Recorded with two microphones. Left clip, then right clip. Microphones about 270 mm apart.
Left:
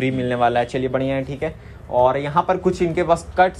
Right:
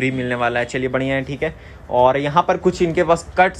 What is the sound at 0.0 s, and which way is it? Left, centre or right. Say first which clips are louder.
A man's voice: left 1 dB; centre.